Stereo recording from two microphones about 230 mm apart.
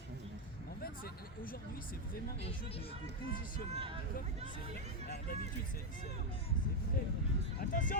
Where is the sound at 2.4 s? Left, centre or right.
Left.